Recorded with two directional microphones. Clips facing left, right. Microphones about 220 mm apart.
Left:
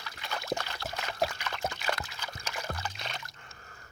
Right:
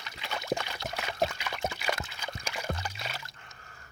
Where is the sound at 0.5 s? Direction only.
15° right (ahead or behind).